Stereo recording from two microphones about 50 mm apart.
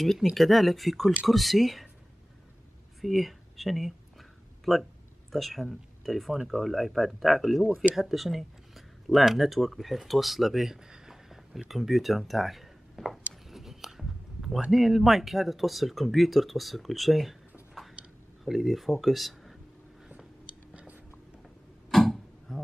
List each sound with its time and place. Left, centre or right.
0.0 s speech: centre
3.0 s speech: centre
7.6 s speech: right
7.9 s speech: centre
13.5 s a sound: centre
14.7 s speech: centre
21.9 s tick-tock: centre